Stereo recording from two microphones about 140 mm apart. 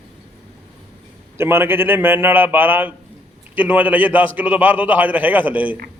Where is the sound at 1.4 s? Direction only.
15° right (ahead or behind).